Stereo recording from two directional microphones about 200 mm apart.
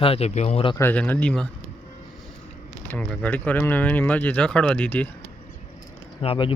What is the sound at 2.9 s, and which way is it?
Speech, 5° left (ahead or behind).